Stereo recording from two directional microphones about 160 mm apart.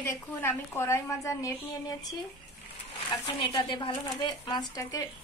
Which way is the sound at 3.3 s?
35° left (ahead or behind).